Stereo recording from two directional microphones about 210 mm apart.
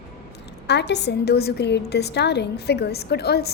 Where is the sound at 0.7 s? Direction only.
55° left (ahead or behind).